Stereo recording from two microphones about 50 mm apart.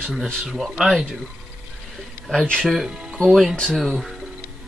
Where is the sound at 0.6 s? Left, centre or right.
Centre.